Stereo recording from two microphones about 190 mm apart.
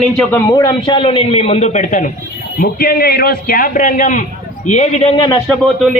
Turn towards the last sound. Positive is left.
turn(degrees=0)  # may be behind; listen again after turning